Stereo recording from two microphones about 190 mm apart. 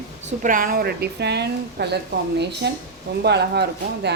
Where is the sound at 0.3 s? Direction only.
45° right (ahead or behind).